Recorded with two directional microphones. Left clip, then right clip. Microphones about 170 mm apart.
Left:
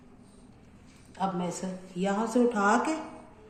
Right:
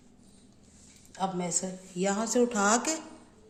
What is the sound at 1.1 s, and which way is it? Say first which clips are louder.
Speech: left 1 dB; 80° right.